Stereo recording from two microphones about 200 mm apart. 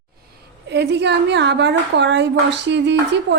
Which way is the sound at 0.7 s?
60° right (ahead or behind).